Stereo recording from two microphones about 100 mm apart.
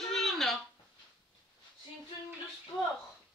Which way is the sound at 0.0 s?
Centre (ahead or behind).